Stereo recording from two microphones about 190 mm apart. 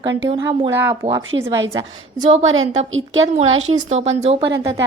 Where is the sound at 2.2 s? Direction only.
35° right (ahead or behind).